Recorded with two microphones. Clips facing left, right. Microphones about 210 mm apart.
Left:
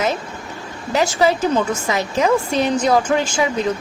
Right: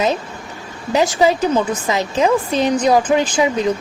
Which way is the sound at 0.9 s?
20° right (ahead or behind).